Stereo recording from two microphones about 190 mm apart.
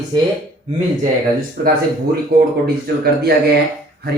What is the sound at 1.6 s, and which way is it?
Speech, 50° right (ahead or behind).